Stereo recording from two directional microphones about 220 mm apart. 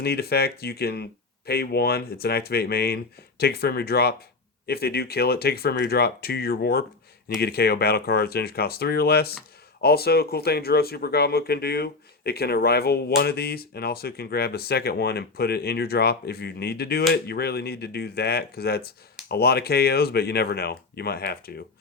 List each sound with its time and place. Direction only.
0.0 s speech: 45° left (ahead or behind)